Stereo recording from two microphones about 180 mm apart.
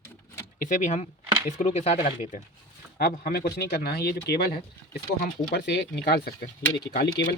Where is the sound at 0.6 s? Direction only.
40° left (ahead or behind).